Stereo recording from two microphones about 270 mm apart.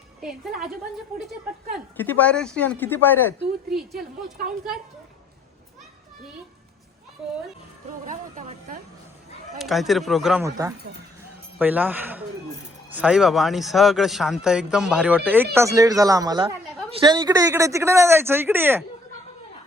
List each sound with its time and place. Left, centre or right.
0.2 s speech: centre
2.0 s speech: centre
8.0 s speech: right
9.6 s speech: centre